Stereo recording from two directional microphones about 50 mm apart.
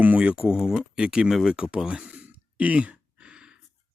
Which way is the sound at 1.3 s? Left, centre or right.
Centre.